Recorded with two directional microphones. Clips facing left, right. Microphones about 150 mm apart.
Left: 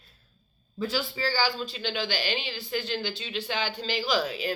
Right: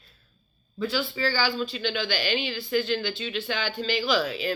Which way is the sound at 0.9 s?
40° left (ahead or behind).